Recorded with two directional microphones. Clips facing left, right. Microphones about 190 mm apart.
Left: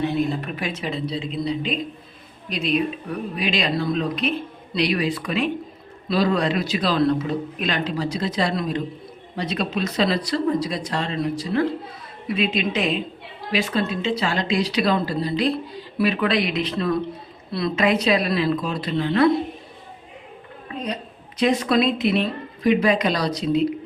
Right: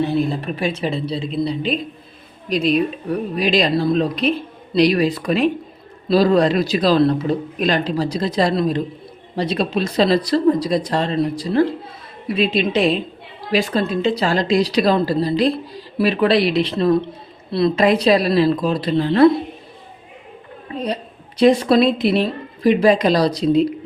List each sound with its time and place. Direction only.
0.2 s a woman's voice: 30° right (ahead or behind)
20.7 s a woman's voice: 30° right (ahead or behind)